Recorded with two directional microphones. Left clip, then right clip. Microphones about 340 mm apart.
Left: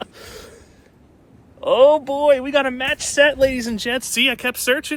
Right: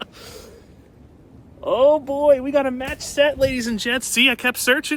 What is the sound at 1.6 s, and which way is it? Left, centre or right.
A man's voice, left.